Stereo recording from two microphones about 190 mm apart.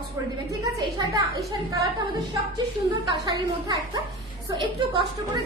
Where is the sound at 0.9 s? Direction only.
20° right (ahead or behind).